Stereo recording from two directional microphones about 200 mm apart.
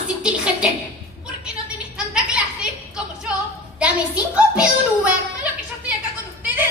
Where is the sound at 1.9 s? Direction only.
5° right (ahead or behind).